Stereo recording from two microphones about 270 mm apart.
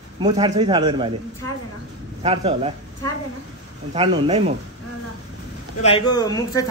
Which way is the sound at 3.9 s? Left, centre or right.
Right.